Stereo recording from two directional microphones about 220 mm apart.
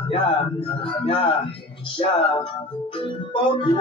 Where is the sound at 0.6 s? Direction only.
25° left (ahead or behind).